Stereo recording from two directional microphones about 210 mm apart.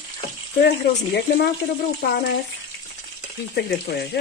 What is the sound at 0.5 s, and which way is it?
Speech, 50° left (ahead or behind).